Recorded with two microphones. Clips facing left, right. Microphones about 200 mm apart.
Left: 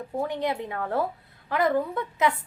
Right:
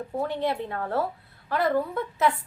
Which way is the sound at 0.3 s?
15° left (ahead or behind).